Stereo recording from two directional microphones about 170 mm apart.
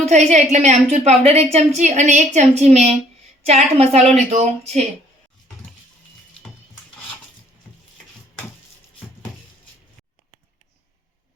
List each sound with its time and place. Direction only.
0.0 s a woman's voice: 40° right (ahead or behind)